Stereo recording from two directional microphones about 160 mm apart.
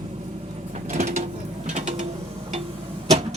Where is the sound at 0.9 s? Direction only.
50° right (ahead or behind).